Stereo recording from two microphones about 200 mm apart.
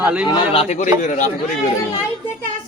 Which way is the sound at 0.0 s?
5° right (ahead or behind).